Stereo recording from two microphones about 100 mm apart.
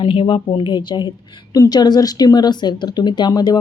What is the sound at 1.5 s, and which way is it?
A woman's voice, 40° left (ahead or behind).